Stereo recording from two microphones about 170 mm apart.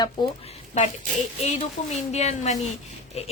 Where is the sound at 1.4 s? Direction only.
40° left (ahead or behind).